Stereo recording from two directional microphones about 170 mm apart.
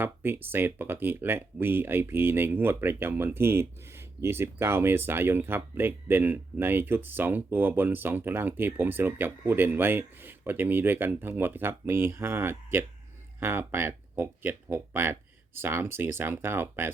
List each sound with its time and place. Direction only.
0.0 s speech: 10° right (ahead or behind)